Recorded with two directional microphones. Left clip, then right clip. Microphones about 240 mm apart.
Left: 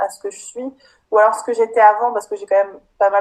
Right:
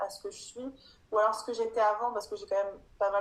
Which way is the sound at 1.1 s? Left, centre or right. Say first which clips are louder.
Left 14 dB; left.